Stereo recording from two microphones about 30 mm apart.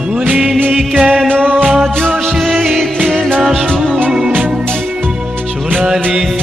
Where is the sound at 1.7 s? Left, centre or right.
Centre.